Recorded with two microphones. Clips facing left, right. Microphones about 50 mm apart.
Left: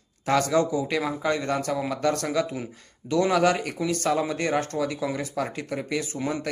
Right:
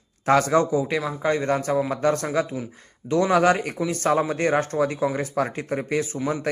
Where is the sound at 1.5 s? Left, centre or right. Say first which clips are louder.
Right 4 dB; right.